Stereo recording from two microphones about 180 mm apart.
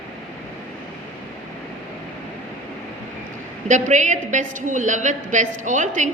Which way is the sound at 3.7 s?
40° right (ahead or behind).